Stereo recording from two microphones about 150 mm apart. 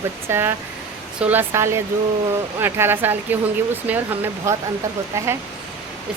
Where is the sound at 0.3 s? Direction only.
15° right (ahead or behind).